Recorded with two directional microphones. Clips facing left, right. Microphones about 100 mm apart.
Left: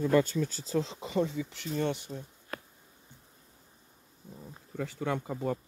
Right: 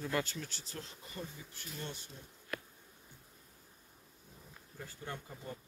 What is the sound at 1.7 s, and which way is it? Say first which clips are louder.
Speech: left 14 dB; 65° left (ahead or behind).